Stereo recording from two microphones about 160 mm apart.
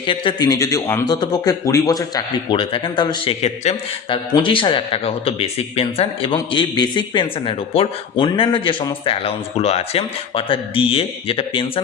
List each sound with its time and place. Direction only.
0.0 s speech: 30° left (ahead or behind)
3.4 s a man's voice: 45° left (ahead or behind)
4.4 s speech: 30° left (ahead or behind)